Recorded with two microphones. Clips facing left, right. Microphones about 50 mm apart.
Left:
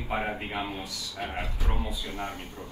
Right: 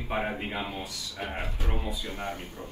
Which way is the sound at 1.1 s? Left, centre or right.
Right.